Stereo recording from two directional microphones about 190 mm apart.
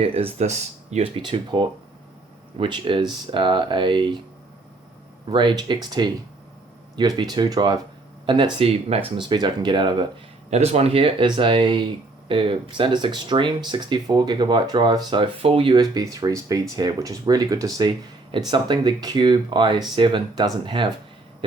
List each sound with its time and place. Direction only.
0.0 s speech: 30° right (ahead or behind)
5.3 s speech: 25° right (ahead or behind)